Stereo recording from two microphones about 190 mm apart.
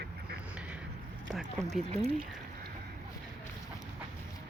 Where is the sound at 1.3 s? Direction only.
Centre (ahead or behind).